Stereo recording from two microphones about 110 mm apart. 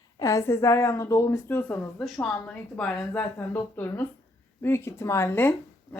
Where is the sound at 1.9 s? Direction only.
10° left (ahead or behind).